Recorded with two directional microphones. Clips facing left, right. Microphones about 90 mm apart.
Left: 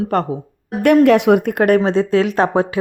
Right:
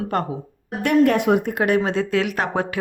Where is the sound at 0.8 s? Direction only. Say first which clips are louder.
Left 6 dB; 70° left (ahead or behind); by 1.8 s 50° left (ahead or behind).